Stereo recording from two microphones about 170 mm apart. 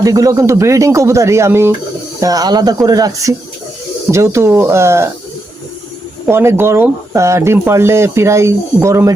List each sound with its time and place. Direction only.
0.0 s speech: 20° right (ahead or behind)
6.2 s speech: 15° right (ahead or behind)